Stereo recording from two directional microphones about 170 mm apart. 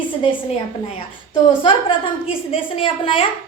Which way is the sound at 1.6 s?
30° left (ahead or behind).